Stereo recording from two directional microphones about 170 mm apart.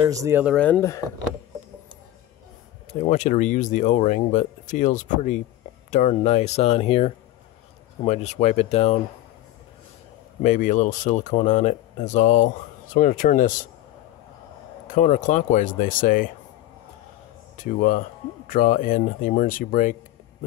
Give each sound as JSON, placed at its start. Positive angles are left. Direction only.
{"t": 0.0, "sound": "speech", "side_deg": -20}
{"t": 0.6, "sound": "speech", "side_deg": 10}
{"t": 2.9, "sound": "speech", "side_deg": 45}
{"t": 10.4, "sound": "speech", "side_deg": 50}
{"t": 14.9, "sound": "speech", "side_deg": 50}
{"t": 17.6, "sound": "speech", "side_deg": 50}